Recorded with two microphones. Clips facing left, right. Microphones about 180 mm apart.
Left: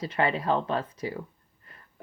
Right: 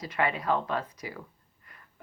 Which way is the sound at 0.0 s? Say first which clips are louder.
Left 3 dB; 30° left (ahead or behind).